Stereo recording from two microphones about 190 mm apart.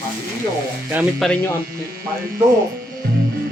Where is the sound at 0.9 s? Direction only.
5° right (ahead or behind).